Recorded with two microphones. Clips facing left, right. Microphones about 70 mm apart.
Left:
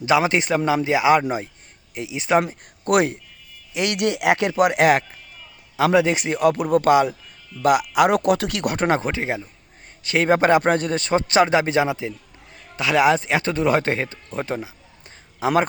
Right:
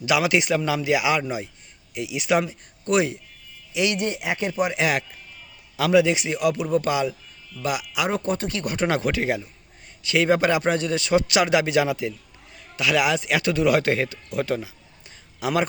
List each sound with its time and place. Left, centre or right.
0.0 s a man's voice: left
2.5 s speech: left
3.9 s speech: left
4.8 s a man's voice: left
5.7 s a man's voice: left
8.2 s speech: left
8.9 s speech: left
10.0 s a man's voice: left